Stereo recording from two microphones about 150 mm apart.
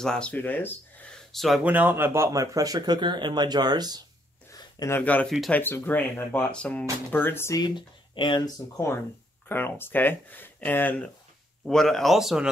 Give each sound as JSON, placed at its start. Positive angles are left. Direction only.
{"t": 0.0, "sound": "speech", "side_deg": 5}
{"t": 1.1, "sound": "speech", "side_deg": 0}
{"t": 1.6, "sound": "speech", "side_deg": -10}
{"t": 4.5, "sound": "a sound", "side_deg": 25}
{"t": 4.9, "sound": "speech", "side_deg": 10}